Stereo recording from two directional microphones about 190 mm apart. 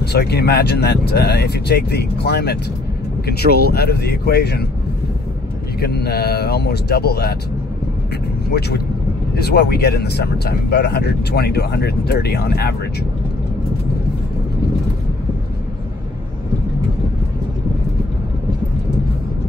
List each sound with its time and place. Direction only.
0.0 s speech: 60° left (ahead or behind)
5.8 s speech: 55° left (ahead or behind)
8.5 s speech: 60° left (ahead or behind)